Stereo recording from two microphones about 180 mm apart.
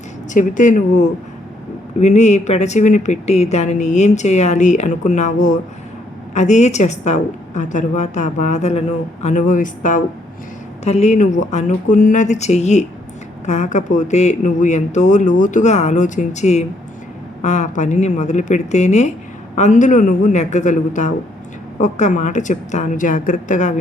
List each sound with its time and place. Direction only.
0.3 s a woman's voice: 45° left (ahead or behind)